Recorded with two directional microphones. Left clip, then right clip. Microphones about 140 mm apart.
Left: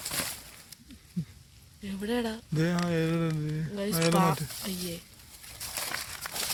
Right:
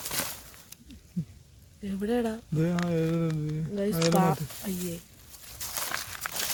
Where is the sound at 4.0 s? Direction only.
75° right (ahead or behind); by 4.9 s 60° right (ahead or behind).